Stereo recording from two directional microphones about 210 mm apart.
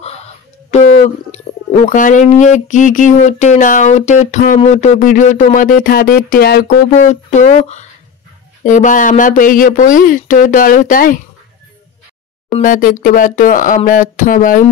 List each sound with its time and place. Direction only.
0.7 s speech: 30° left (ahead or behind)
12.5 s speech: 40° left (ahead or behind)